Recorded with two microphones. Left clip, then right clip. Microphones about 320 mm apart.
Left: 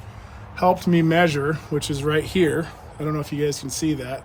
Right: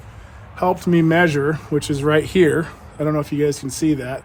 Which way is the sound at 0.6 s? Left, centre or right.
Centre.